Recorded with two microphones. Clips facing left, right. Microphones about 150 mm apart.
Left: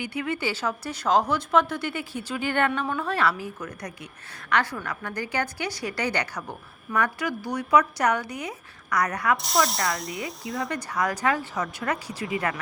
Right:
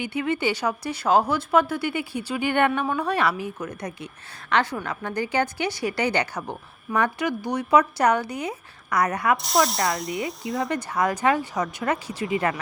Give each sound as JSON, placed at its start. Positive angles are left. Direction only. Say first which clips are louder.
{"t": 0.0, "sound": "a woman's voice", "louder": "right 4 dB", "side_deg": -25}
{"t": 9.4, "sound": "speech", "louder": "right 3 dB", "side_deg": 0}
{"t": 10.7, "sound": "a woman's voice", "louder": "right 3 dB", "side_deg": -25}